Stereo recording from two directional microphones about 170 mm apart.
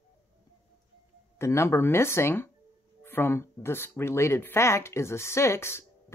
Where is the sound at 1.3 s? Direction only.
15° left (ahead or behind).